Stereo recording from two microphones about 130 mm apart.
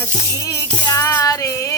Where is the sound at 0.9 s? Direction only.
25° left (ahead or behind).